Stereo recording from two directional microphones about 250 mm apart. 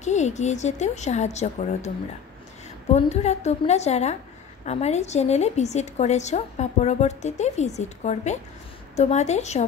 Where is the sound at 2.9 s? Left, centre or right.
Left.